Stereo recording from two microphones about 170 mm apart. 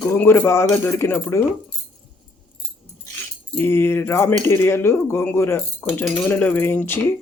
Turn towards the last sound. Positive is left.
turn(degrees=15)  # may be behind; listen again after turning